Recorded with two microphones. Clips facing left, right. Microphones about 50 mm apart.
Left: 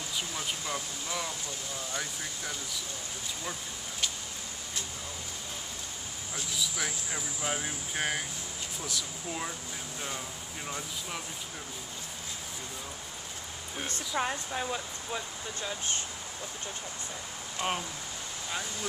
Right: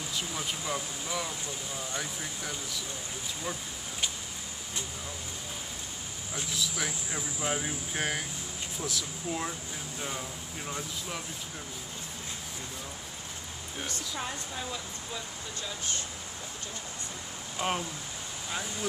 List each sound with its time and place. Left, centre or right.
0.1 s speech: centre
6.5 s speech: centre
13.8 s speech: left
17.6 s speech: centre